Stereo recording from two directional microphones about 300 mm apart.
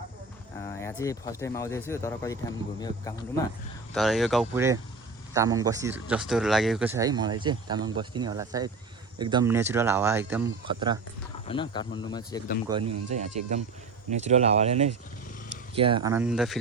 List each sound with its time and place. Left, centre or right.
0.7 s speech: centre
3.9 s a man's voice: centre
11.4 s speech: centre
12.7 s a man's voice: centre